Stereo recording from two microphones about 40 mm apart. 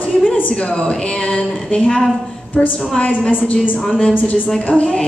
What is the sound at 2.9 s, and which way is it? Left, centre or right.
Speech, left.